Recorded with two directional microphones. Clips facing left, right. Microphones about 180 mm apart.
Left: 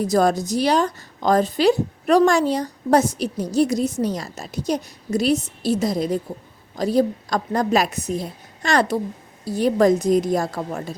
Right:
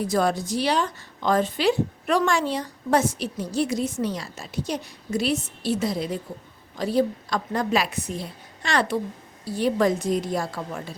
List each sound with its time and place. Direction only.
0.0 s a woman's voice: 40° left (ahead or behind)